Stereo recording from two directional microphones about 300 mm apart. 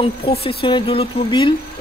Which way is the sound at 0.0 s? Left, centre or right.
Centre.